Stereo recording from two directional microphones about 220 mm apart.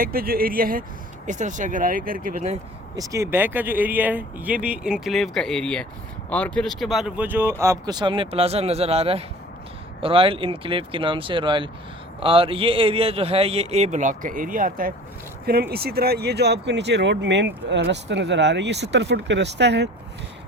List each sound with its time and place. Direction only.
0.0 s speech: 45° right (ahead or behind)
2.9 s a man's voice: 15° right (ahead or behind); by 19.9 s 50° right (ahead or behind)